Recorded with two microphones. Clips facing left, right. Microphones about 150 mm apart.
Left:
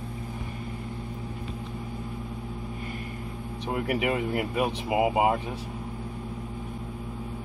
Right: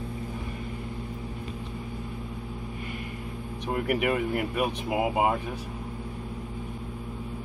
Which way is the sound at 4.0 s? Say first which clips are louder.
Even; 25° left (ahead or behind).